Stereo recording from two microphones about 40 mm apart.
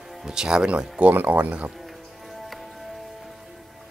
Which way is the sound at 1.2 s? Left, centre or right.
Right.